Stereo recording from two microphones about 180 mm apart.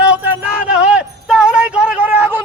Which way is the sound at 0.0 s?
10° right (ahead or behind).